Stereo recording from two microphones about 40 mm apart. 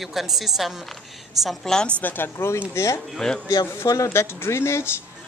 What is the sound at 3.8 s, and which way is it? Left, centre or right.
Speech, left.